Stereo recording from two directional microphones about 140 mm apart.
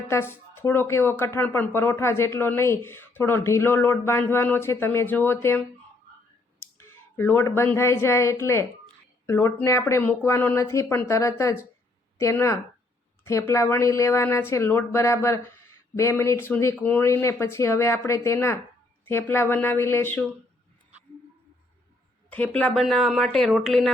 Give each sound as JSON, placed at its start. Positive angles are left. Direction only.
{"t": 0.1, "sound": "speech", "side_deg": 20}
{"t": 22.3, "sound": "speech", "side_deg": 10}